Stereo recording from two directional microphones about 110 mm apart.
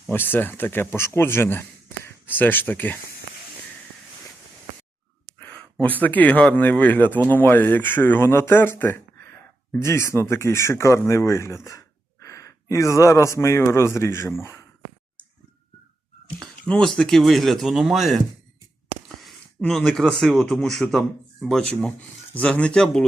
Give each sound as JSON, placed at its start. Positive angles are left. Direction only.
{"t": 0.1, "sound": "speech", "side_deg": 15}
{"t": 5.4, "sound": "a sound", "side_deg": 10}
{"t": 5.8, "sound": "speech", "side_deg": 15}
{"t": 16.4, "sound": "speech", "side_deg": 5}